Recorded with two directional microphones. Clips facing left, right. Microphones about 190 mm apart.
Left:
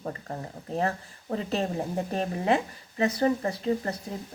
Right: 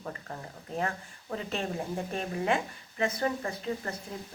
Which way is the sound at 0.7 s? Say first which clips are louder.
Left 4 dB; 35° left (ahead or behind).